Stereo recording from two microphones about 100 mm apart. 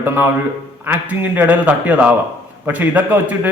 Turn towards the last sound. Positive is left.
turn(degrees=-15)  # may be behind; listen again after turning